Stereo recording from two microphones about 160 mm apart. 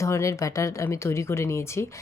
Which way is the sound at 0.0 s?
20° left (ahead or behind).